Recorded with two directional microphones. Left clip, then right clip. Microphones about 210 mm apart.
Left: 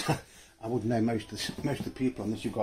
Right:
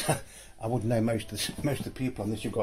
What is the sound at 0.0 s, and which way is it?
Speech, 55° right (ahead or behind).